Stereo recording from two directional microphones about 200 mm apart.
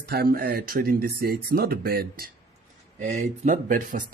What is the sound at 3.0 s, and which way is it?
Speech, 40° right (ahead or behind).